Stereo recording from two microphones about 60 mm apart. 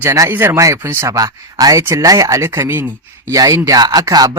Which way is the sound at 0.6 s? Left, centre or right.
Right.